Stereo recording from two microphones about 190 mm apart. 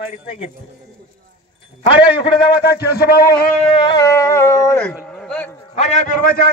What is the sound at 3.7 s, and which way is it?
Music, 25° left (ahead or behind).